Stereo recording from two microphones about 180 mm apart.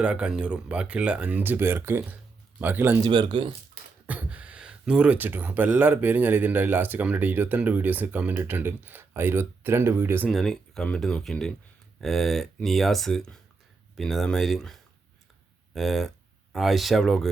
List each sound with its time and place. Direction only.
0.0 s speech: 5° right (ahead or behind)
3.0 s speech: 25° right (ahead or behind)
4.0 s speech: 10° right (ahead or behind)
10.2 s speech: centre (ahead or behind)